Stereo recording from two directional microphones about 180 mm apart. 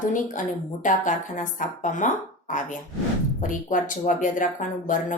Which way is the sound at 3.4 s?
45° left (ahead or behind).